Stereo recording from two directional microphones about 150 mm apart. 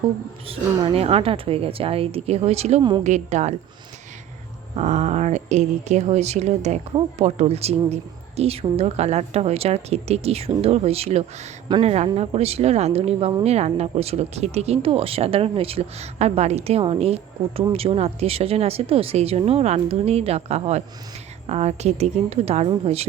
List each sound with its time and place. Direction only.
0.4 s speech: 40° right (ahead or behind)
4.8 s speech: 50° right (ahead or behind)